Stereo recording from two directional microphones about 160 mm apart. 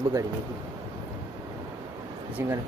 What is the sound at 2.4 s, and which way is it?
Speech, 15° right (ahead or behind).